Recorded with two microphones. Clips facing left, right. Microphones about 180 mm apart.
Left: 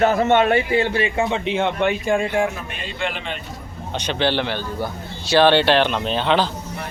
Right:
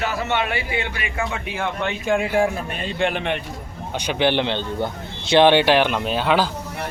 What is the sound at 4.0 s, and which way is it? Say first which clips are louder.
Speech: right 1 dB; 15° right (ahead or behind).